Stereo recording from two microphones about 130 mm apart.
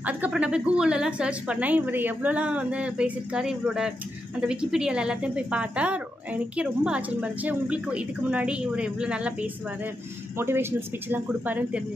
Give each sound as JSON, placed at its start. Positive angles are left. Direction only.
{"t": 0.0, "sound": "a woman's voice", "side_deg": -10}